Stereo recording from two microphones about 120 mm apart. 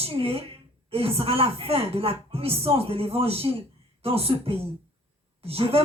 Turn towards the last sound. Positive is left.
turn(degrees=-50)  # may be behind; listen again after turning